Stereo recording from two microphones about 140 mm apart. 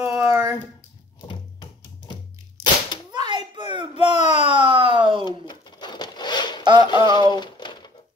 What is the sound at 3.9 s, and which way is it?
Speech, 50° left (ahead or behind).